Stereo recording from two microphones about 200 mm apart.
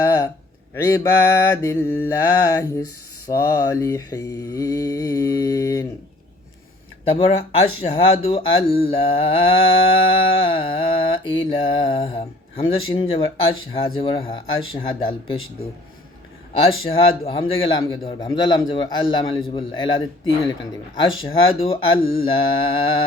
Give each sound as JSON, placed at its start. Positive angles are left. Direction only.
{"t": 0.0, "sound": "a sound", "side_deg": 15}
{"t": 0.7, "sound": "mantra", "side_deg": 10}
{"t": 7.0, "sound": "mantra", "side_deg": 30}
{"t": 16.8, "sound": "mantra", "side_deg": 25}